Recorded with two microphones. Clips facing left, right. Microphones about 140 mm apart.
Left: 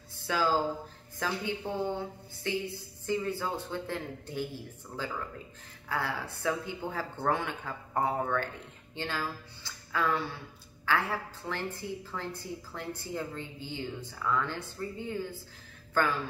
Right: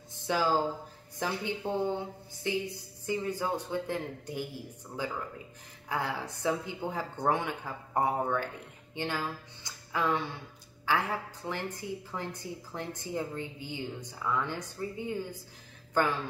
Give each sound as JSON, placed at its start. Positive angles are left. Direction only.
{"t": 0.3, "sound": "a woman's voice", "side_deg": -15}